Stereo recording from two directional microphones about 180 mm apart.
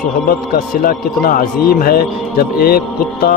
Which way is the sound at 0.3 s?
55° left (ahead or behind).